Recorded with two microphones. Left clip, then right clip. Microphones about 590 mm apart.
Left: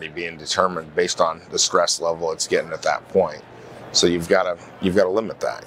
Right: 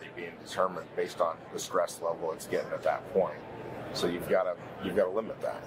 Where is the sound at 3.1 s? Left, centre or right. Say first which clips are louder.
Left 9 dB; left.